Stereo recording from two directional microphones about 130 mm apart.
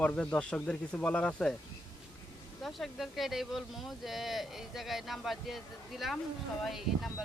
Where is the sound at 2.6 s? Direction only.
Centre (ahead or behind).